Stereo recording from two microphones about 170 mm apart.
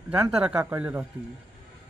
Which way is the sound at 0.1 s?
5° right (ahead or behind).